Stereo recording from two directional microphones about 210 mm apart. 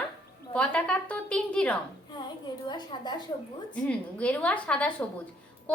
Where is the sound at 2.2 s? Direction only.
20° left (ahead or behind).